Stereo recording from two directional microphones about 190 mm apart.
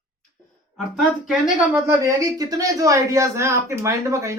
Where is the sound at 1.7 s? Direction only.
15° right (ahead or behind).